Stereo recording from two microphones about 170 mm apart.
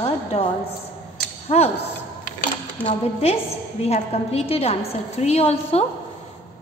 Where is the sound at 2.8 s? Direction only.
35° left (ahead or behind).